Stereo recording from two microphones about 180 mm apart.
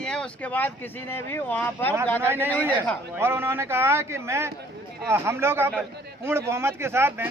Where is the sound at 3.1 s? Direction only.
15° right (ahead or behind).